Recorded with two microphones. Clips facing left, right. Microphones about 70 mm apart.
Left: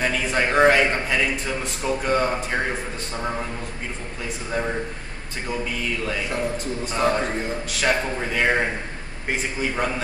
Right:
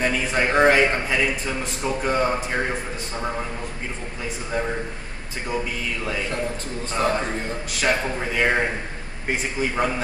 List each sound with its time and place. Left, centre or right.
0.0 s a man's voice: centre
7.0 s a man's voice: centre